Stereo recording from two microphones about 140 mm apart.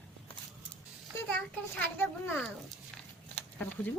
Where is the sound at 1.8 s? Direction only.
15° left (ahead or behind).